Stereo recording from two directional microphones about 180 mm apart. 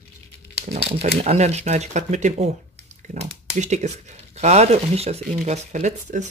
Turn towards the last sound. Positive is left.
turn(degrees=-40)  # may be behind; listen again after turning